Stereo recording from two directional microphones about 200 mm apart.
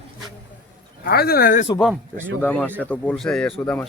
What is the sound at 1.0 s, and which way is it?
Speech, 50° left (ahead or behind).